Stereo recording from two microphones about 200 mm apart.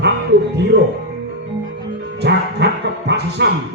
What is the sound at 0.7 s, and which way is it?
Speech, 60° right (ahead or behind).